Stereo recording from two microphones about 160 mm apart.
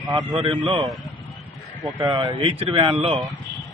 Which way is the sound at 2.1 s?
25° right (ahead or behind).